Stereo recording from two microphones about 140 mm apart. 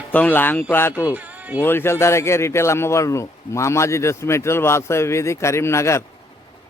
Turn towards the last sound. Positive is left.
turn(degrees=20)  # may be behind; listen again after turning